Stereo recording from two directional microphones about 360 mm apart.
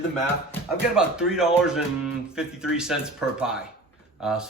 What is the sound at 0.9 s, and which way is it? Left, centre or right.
Speech, centre.